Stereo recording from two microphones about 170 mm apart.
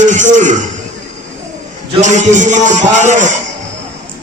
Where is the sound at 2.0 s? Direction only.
45° right (ahead or behind).